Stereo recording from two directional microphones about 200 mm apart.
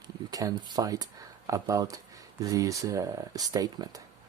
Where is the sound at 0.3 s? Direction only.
15° right (ahead or behind).